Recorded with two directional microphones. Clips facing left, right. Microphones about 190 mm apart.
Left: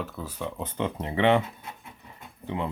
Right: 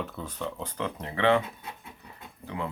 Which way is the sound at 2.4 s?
20° left (ahead or behind).